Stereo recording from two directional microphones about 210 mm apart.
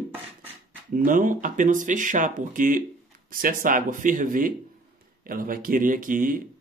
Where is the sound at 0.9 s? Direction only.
40° right (ahead or behind).